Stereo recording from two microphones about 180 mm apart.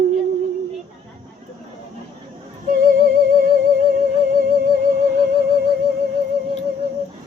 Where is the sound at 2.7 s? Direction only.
50° right (ahead or behind).